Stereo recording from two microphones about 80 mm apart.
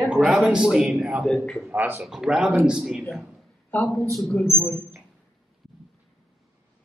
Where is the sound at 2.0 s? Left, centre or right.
Centre.